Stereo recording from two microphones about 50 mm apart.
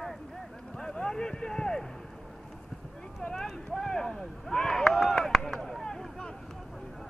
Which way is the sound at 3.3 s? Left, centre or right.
Centre.